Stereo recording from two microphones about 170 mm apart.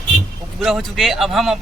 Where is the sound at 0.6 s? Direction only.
Centre (ahead or behind).